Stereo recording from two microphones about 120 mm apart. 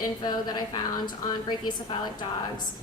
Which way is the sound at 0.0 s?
35° left (ahead or behind).